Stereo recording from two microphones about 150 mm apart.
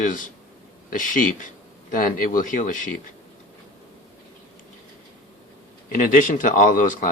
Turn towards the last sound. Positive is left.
turn(degrees=60)  # may be behind; listen again after turning